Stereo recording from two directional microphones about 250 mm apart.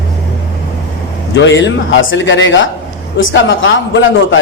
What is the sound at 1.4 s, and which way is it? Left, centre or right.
A woman's voice, left.